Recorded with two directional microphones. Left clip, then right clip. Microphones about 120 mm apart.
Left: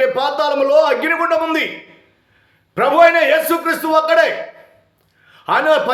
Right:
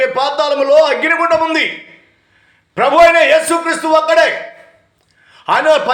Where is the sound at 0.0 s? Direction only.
25° left (ahead or behind).